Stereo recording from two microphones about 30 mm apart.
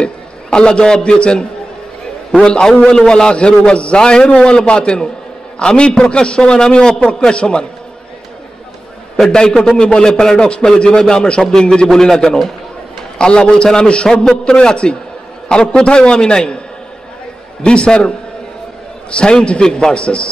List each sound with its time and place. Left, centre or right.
0.0 s a sound: left
0.9 s a man's voice: left
2.9 s a man's voice: left
3.3 s a man's voice: left
9.3 s a man's voice: left
9.8 s a man's voice: left
10.0 s a man's voice: left
11.9 s a man's voice: centre
14.0 s a man's voice: centre
17.6 s a man's voice: left
19.6 s a man's voice: left
19.9 s a man's voice: left